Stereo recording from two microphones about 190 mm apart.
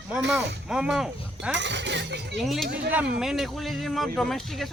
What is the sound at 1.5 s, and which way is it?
Speech, 70° right (ahead or behind).